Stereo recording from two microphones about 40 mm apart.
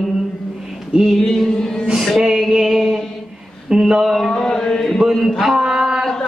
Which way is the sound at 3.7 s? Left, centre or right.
Centre.